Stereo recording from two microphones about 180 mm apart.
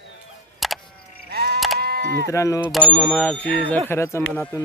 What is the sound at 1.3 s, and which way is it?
Bleat, 60° right (ahead or behind).